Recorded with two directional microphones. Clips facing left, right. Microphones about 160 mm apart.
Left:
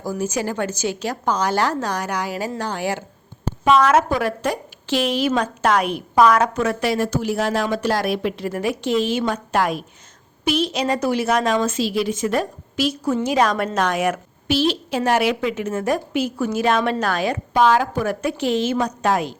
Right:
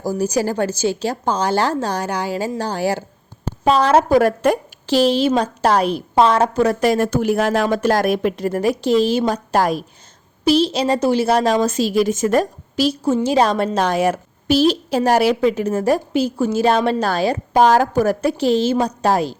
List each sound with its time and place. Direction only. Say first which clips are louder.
0.0 s a woman's voice: right 4 dB; 40° right (ahead or behind)
4.2 s speech: right 7 dB; 50° right (ahead or behind)
4.9 s a woman's voice: right 5 dB; 35° right (ahead or behind)